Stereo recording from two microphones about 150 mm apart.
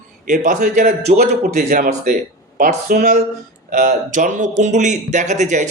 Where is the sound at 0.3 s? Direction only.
60° right (ahead or behind).